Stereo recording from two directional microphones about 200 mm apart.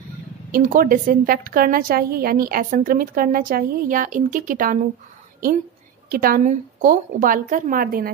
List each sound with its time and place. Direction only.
0.5 s a woman's voice: 45° right (ahead or behind)
6.0 s a woman's voice: 45° right (ahead or behind)